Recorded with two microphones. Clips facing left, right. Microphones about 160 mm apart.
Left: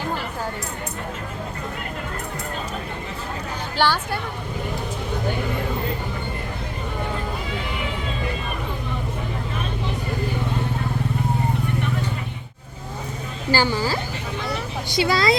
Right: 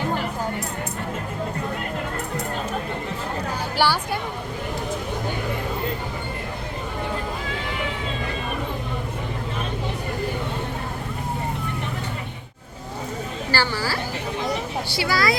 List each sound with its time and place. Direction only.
3.8 s speech: 10° right (ahead or behind)
13.5 s a woman's voice: 15° left (ahead or behind)